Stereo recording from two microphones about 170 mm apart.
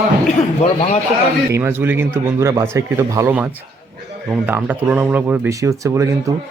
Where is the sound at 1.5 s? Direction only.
15° right (ahead or behind).